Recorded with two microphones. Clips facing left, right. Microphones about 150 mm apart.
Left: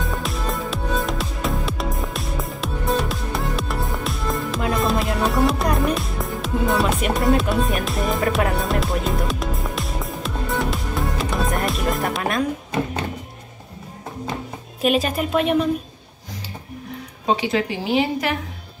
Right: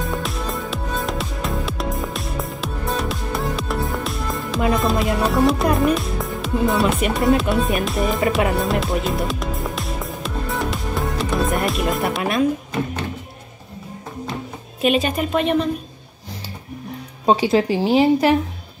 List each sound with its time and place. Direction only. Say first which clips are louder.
0.0 s music: right 1 dB; centre (ahead or behind)
14.8 s speech: right 1 dB; centre (ahead or behind)
17.3 s a woman's voice: right 5 dB; 35° right (ahead or behind)